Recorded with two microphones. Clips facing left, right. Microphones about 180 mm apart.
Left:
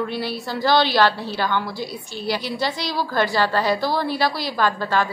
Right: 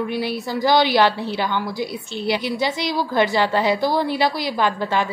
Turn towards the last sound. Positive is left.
turn(degrees=-20)  # may be behind; listen again after turning